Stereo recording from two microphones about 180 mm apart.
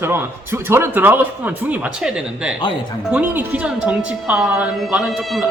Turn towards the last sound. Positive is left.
turn(degrees=0)  # may be behind; listen again after turning